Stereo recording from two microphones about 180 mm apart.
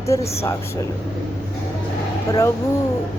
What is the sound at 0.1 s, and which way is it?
Speech, 15° left (ahead or behind).